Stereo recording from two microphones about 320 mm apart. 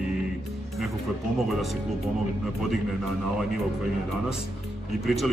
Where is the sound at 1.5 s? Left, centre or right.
Centre.